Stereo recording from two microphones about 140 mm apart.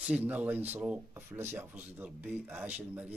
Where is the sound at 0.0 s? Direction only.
10° right (ahead or behind).